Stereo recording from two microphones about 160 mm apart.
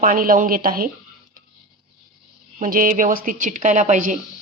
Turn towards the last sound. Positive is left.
turn(degrees=-50)  # may be behind; listen again after turning